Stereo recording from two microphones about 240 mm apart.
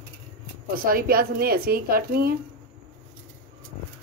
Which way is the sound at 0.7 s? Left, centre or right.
Right.